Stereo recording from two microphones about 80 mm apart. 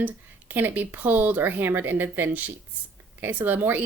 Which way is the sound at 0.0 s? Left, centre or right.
Right.